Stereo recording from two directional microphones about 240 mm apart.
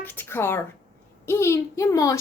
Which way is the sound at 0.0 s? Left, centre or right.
Centre.